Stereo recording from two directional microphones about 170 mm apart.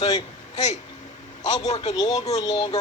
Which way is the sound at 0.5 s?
40° left (ahead or behind).